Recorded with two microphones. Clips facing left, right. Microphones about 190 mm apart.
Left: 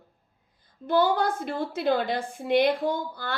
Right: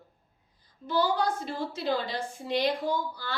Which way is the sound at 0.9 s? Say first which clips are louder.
Left 4 dB; 55° left (ahead or behind).